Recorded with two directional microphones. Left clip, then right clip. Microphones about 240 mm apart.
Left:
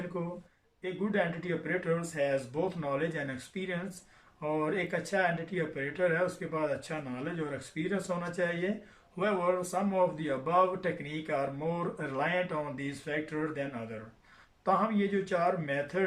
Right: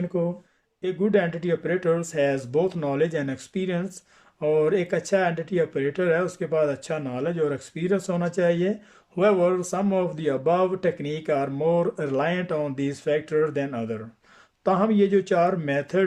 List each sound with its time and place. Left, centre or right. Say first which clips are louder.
0.8 s a man's voice: right 9 dB; right